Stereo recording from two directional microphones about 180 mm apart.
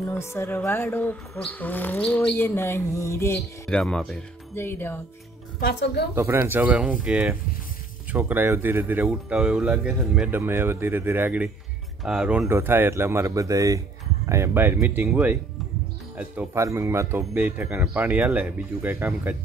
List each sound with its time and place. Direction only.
0.1 s speech: 15° left (ahead or behind)
4.6 s speech: 10° left (ahead or behind)
5.6 s a woman's voice: 65° left (ahead or behind)
6.1 s speech: 15° right (ahead or behind)